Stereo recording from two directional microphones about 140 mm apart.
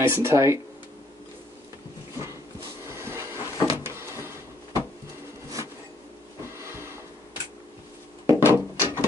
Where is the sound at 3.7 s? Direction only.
20° right (ahead or behind).